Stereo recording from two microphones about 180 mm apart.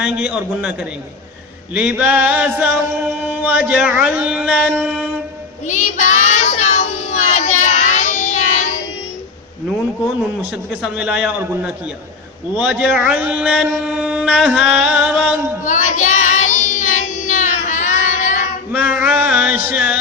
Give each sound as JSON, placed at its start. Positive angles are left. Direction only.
{"t": 0.0, "sound": "mantra", "side_deg": -5}
{"t": 1.7, "sound": "a sound", "side_deg": -5}
{"t": 3.0, "sound": "mantra", "side_deg": -10}
{"t": 5.6, "sound": "child singing", "side_deg": 40}
{"t": 10.8, "sound": "mantra", "side_deg": -5}
{"t": 15.6, "sound": "child singing", "side_deg": 45}
{"t": 18.7, "sound": "a sound", "side_deg": -10}